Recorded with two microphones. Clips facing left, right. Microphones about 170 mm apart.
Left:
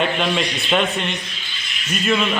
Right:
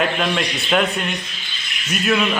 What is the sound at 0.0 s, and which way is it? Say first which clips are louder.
A man's voice: even; centre (ahead or behind).